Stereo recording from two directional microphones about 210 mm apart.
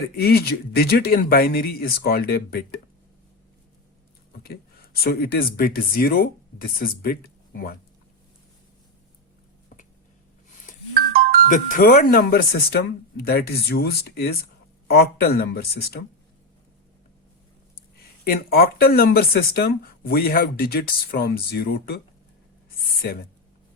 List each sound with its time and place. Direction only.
0.2 s speech: 50° left (ahead or behind)
5.0 s speech: 45° left (ahead or behind)
11.1 s music: 45° right (ahead or behind)
11.4 s speech: 40° left (ahead or behind)
18.3 s speech: 45° left (ahead or behind)